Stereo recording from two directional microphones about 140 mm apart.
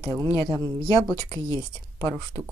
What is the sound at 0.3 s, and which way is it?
Speech, 20° left (ahead or behind).